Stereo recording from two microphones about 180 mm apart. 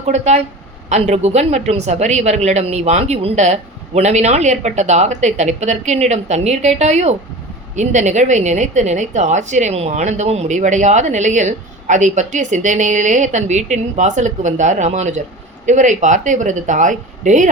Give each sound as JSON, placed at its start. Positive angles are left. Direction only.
{"t": 0.0, "sound": "a woman's voice", "side_deg": -35}